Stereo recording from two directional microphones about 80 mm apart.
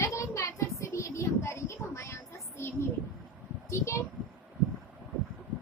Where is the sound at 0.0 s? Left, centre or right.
Left.